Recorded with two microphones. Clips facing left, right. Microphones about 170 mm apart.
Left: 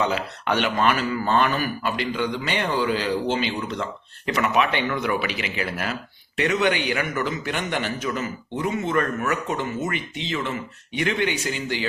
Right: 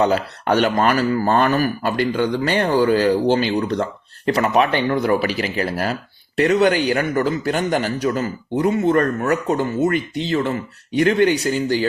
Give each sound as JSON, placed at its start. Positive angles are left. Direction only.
{"t": 0.0, "sound": "speech", "side_deg": -40}